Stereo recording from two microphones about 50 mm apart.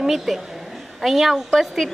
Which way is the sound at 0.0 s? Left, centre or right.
Centre.